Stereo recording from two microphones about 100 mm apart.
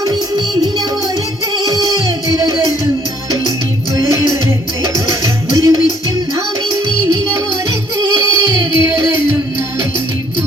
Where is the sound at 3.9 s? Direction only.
30° right (ahead or behind).